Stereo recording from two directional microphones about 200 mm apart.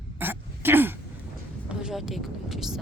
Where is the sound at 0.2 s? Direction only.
10° right (ahead or behind).